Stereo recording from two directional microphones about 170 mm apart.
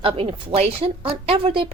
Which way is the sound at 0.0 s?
35° right (ahead or behind).